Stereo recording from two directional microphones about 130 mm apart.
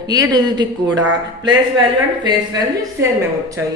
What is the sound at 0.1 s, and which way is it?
Speech, 30° right (ahead or behind).